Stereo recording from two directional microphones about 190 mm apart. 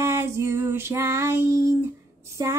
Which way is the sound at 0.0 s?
15° right (ahead or behind).